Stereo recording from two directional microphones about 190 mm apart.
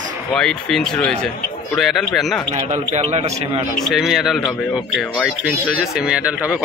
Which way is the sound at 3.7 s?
Centre (ahead or behind).